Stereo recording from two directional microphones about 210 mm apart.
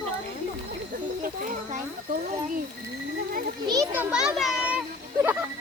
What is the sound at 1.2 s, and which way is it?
Speech, 40° right (ahead or behind).